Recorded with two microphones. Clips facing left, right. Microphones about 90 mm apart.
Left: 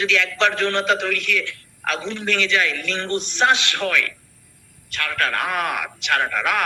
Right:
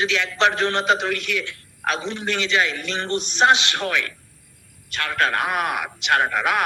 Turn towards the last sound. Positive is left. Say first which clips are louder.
# right 1 dB
turn(degrees=-20)  # may be behind; listen again after turning